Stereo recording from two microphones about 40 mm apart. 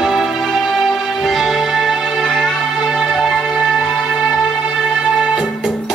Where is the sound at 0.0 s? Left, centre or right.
Centre.